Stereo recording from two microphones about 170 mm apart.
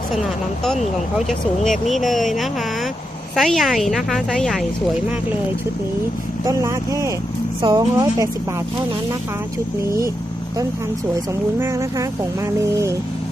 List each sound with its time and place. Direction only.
1.3 s a woman's voice: centre (ahead or behind)
6.4 s speech: 15° right (ahead or behind)
11.6 s speech: 15° right (ahead or behind)